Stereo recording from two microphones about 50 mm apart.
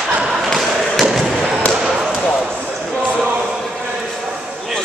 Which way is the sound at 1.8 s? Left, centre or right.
Centre.